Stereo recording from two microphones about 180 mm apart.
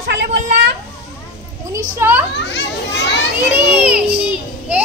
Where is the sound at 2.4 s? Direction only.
75° left (ahead or behind).